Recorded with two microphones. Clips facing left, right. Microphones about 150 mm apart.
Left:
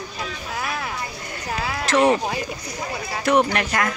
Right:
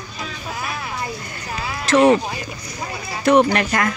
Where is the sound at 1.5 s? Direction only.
80° left.